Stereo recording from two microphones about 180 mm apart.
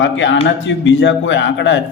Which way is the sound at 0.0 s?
90° left.